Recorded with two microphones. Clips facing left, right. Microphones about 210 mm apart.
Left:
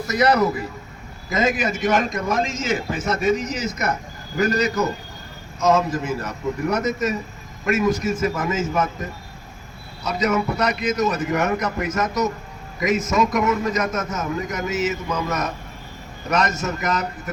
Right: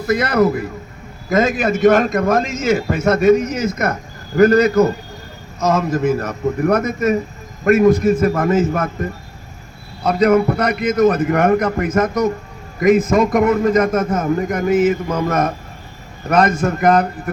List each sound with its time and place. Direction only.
0.1 s a man's voice: 55° right (ahead or behind)
10.0 s a man's voice: 55° right (ahead or behind)